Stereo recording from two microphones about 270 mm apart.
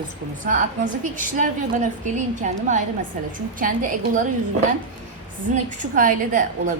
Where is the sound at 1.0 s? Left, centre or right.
Right.